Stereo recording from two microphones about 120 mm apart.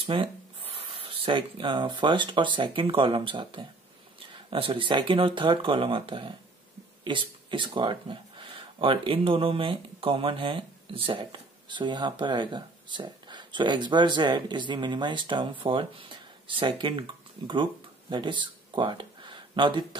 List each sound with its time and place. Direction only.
0.0 s speech: 50° right (ahead or behind)